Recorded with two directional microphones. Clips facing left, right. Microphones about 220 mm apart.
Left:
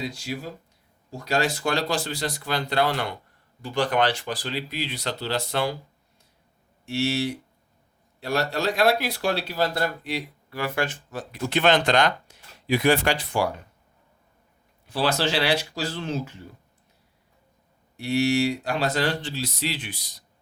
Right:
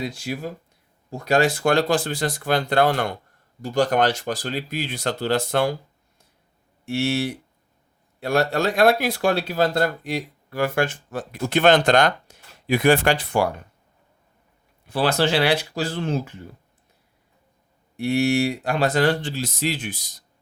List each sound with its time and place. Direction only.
0.0 s speech: 55° right (ahead or behind)
6.8 s speech: 55° right (ahead or behind)
14.8 s speech: 55° right (ahead or behind)
17.9 s speech: 55° right (ahead or behind)